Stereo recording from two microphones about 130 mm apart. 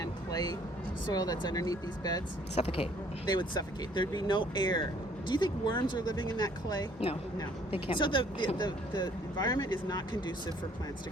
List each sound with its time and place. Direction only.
0.0 s music: 30° left (ahead or behind)
1.0 s speech: 30° left (ahead or behind)
2.6 s speech: 50° left (ahead or behind)
3.2 s speech: 35° left (ahead or behind)